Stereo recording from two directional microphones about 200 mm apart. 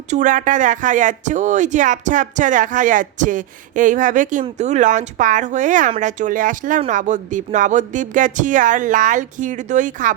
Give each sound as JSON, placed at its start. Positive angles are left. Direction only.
{"t": 0.1, "sound": "speech", "side_deg": -40}